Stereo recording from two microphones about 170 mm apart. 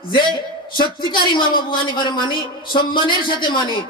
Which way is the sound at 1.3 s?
25° left (ahead or behind).